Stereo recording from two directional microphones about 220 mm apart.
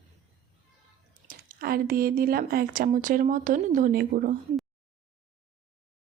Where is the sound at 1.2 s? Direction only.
40° right (ahead or behind).